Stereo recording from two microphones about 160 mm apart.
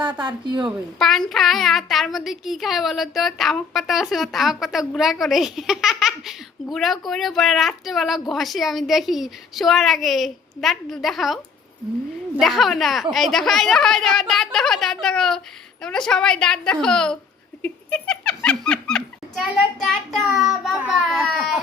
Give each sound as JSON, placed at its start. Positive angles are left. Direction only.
{"t": 0.2, "sound": "speech", "side_deg": -30}
{"t": 0.9, "sound": "a woman's voice", "side_deg": 0}
{"t": 12.4, "sound": "a woman's voice", "side_deg": 0}